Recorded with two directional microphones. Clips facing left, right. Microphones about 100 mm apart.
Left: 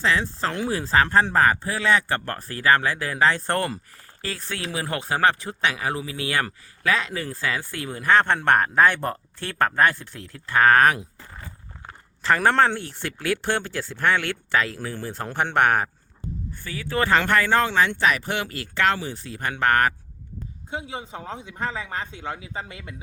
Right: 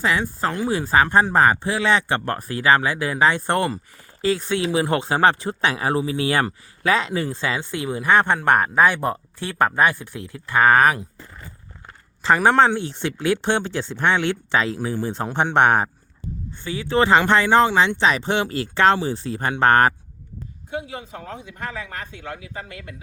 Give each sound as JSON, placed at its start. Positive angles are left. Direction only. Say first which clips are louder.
{"t": 0.0, "sound": "speech", "louder": "right 2 dB", "side_deg": -10}
{"t": 12.2, "sound": "speech", "louder": "right 3 dB", "side_deg": -15}
{"t": 20.7, "sound": "a man's voice", "louder": "right 2 dB", "side_deg": 25}